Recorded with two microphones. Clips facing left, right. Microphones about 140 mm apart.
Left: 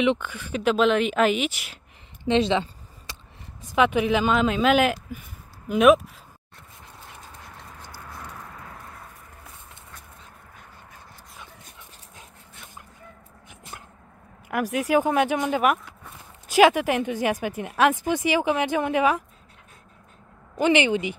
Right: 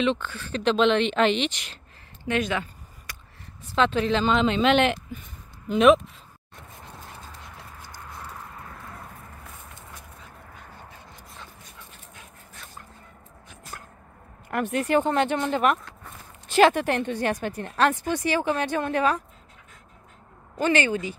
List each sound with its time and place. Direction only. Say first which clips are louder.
0.0 s speech: left 2 dB; 15° left (ahead or behind)
2.2 s a sound: left 5 dB; 25° left (ahead or behind)
3.6 s speech: left 2 dB; 10° left (ahead or behind)
13.5 s a sound: right 1 dB; 20° left (ahead or behind)
14.5 s speech: left 1 dB; 5° left (ahead or behind)
20.5 s speech: left 3 dB; 15° left (ahead or behind)